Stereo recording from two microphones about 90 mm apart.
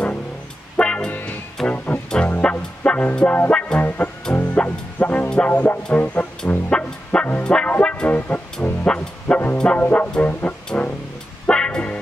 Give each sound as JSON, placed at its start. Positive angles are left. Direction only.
{"t": 0.7, "sound": "music", "side_deg": 10}